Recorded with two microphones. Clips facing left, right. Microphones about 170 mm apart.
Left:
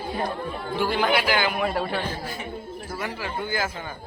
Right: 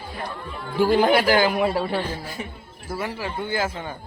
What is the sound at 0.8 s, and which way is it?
A man's voice, 40° right (ahead or behind).